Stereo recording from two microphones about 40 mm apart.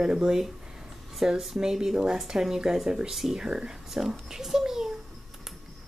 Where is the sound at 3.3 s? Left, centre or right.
Right.